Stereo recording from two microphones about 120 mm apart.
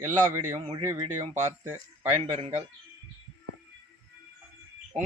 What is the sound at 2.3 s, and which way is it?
Speech, 60° right (ahead or behind).